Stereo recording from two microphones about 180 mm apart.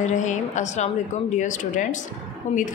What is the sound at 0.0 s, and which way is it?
A woman's voice, 40° left (ahead or behind).